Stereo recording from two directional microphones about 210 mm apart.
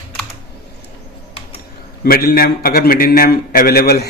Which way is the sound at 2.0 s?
45° left (ahead or behind).